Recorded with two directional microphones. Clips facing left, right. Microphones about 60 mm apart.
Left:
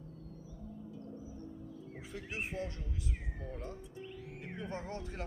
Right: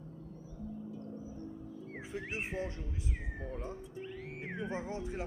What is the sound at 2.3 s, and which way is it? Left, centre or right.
Speech, right.